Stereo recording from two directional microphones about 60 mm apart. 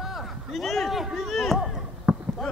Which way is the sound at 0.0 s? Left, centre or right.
Centre.